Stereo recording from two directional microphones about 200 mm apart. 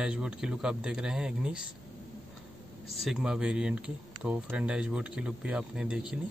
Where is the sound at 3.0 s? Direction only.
Centre (ahead or behind).